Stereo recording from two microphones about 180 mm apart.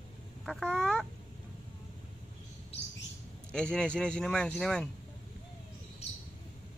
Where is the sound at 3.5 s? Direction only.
5° left (ahead or behind).